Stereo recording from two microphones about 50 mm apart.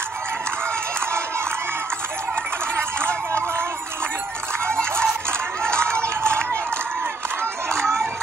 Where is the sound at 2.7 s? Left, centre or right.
Right.